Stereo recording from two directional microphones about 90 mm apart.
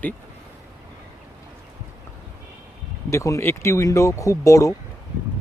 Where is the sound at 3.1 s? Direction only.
35° left (ahead or behind).